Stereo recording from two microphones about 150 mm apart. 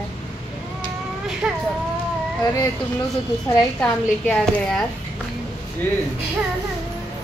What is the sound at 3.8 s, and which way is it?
Speech, 10° left (ahead or behind).